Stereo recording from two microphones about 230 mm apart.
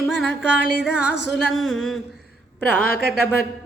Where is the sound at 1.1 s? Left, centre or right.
Left.